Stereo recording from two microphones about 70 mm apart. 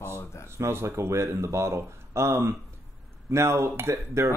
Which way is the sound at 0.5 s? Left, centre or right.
Right.